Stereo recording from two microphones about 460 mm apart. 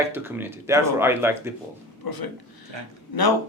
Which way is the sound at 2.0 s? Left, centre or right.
Left.